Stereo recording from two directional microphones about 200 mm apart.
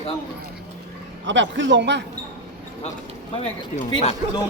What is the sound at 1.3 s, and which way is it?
Speech, 65° right (ahead or behind).